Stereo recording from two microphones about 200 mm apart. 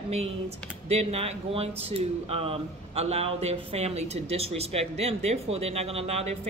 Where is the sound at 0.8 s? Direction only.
30° right (ahead or behind).